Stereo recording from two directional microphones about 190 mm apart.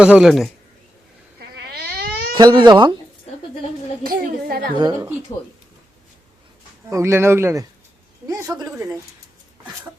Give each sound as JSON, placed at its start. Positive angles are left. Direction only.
{"t": 0.0, "sound": "speech", "side_deg": -5}
{"t": 1.4, "sound": "cat", "side_deg": -55}
{"t": 2.3, "sound": "speech", "side_deg": -20}
{"t": 4.1, "sound": "a woman's voice", "side_deg": -55}
{"t": 4.8, "sound": "speech", "side_deg": -20}
{"t": 6.9, "sound": "speech", "side_deg": -15}